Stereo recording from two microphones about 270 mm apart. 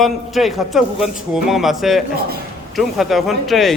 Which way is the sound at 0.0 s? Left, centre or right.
Centre.